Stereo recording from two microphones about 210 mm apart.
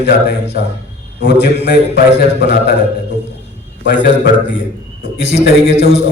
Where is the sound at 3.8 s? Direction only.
60° left (ahead or behind).